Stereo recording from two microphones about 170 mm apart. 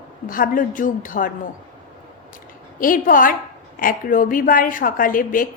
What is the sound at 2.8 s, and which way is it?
A woman's voice, 55° left (ahead or behind).